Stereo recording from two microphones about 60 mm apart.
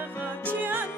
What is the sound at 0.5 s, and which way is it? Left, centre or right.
Music, right.